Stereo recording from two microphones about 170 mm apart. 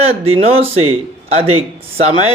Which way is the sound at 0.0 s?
35° right (ahead or behind).